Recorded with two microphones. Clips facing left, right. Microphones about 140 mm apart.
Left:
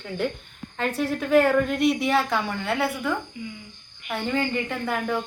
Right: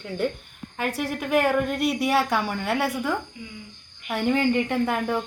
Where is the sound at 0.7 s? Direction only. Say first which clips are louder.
Left 2 dB; 10° right (ahead or behind).